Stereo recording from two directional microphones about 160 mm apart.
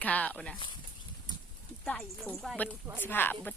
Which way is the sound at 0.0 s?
10° left (ahead or behind).